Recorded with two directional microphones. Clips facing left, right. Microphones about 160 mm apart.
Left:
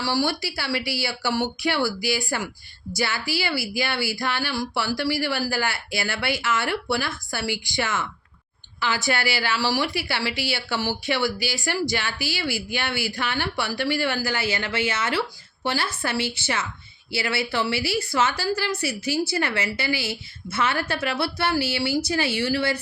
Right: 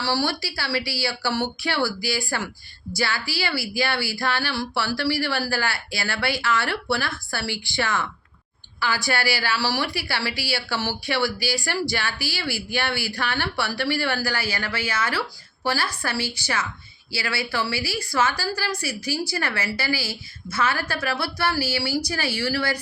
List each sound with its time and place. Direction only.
0.0 s speech: 15° left (ahead or behind)